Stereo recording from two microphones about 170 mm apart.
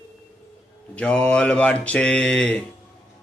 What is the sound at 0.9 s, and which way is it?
A man's voice, 5° left (ahead or behind).